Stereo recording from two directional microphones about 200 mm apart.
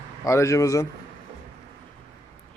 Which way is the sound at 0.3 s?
15° left (ahead or behind).